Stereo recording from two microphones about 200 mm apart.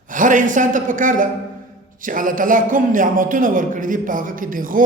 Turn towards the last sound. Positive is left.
turn(degrees=-45)  # may be behind; listen again after turning